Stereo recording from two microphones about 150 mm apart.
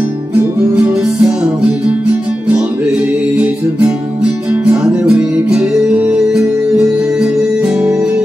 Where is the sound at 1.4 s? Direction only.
10° right (ahead or behind).